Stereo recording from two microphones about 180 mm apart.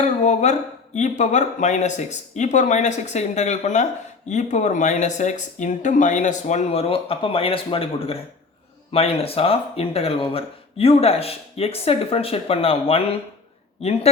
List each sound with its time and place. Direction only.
0.0 s speech: 40° left (ahead or behind)